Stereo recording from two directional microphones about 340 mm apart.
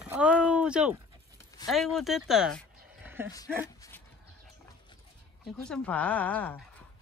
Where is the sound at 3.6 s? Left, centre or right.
Centre.